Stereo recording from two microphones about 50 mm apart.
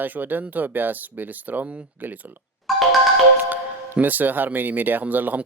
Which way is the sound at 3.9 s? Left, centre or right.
Right.